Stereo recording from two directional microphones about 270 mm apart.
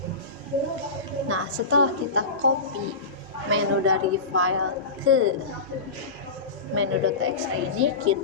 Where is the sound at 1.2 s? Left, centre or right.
Right.